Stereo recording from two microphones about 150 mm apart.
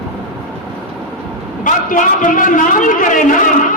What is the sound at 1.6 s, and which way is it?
A man's voice, 60° left (ahead or behind).